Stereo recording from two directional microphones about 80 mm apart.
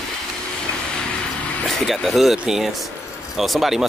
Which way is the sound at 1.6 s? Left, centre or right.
Centre.